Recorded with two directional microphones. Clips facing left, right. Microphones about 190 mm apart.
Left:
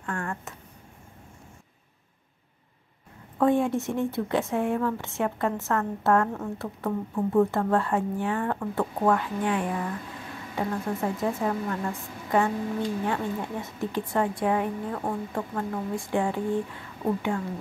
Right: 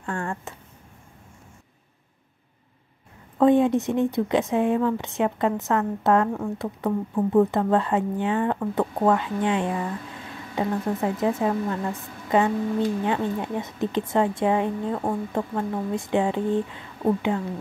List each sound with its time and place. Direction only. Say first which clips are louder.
0.0 s speech: right 3 dB; 30° right (ahead or behind)
3.3 s speech: right 5 dB; 20° right (ahead or behind)